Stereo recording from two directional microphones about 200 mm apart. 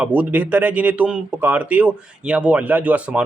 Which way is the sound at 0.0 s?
10° right (ahead or behind).